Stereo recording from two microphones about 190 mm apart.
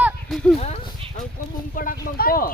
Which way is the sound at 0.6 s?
35° left (ahead or behind).